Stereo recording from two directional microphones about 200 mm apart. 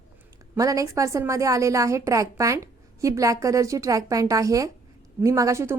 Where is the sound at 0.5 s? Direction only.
15° right (ahead or behind).